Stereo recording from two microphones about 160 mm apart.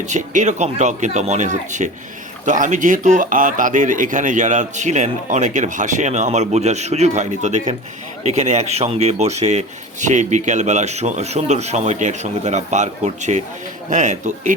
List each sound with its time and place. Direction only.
0.0 s speech: 50° right (ahead or behind)